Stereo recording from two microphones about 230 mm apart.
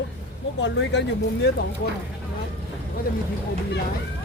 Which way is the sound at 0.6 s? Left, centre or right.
Left.